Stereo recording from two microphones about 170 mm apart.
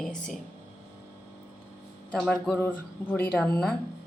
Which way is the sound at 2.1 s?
Centre (ahead or behind).